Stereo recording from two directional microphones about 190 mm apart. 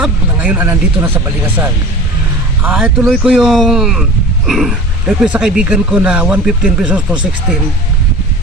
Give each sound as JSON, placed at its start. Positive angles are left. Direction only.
{"t": 0.0, "sound": "speech", "side_deg": -5}